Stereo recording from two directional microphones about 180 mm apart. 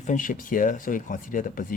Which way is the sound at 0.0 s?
45° left (ahead or behind).